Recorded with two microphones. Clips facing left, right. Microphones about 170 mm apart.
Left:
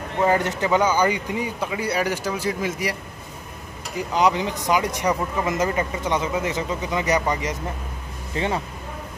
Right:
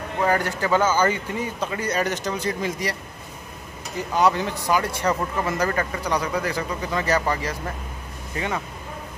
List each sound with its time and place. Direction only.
0.2 s speech: 20° left (ahead or behind)
4.1 s speech: 15° left (ahead or behind)